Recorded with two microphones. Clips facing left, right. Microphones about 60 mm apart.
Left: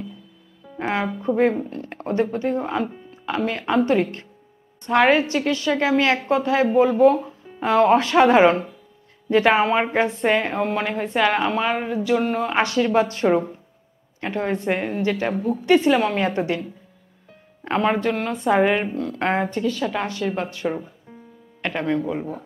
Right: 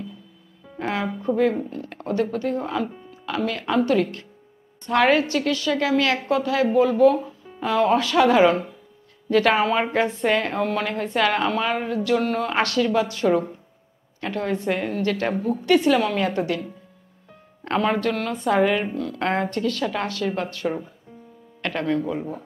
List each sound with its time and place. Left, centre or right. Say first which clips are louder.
0.7 s a woman's voice: left 2 dB; left
12.9 s a woman's voice: left 4 dB; left; by 15.2 s centre
15.2 s speech: left 1 dB; centre
15.6 s a woman's voice: left 2 dB; left
17.6 s a woman's voice: left 1 dB; centre
21.5 s a sound: left 1 dB; centre